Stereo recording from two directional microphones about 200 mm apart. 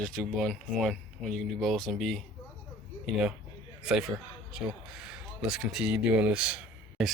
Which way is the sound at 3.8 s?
Centre (ahead or behind).